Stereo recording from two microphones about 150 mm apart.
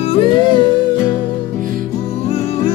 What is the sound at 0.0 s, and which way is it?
Music, 40° left (ahead or behind).